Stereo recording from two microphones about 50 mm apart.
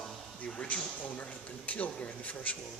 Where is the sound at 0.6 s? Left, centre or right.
Left.